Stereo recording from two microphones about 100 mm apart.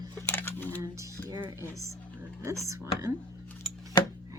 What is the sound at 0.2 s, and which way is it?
Typing, 20° left (ahead or behind).